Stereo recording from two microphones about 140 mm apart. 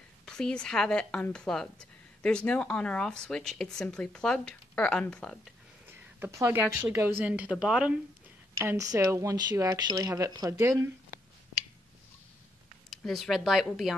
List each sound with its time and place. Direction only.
0.2 s a woman's voice: 5° left (ahead or behind)
5.9 s a woman's voice: 15° right (ahead or behind)
8.5 s speech: 20° right (ahead or behind)
12.9 s a woman's voice: centre (ahead or behind)